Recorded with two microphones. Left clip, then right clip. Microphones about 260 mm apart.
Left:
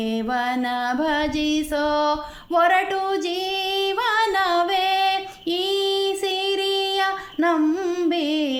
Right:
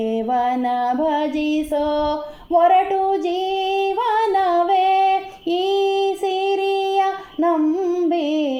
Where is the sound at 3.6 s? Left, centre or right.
Left.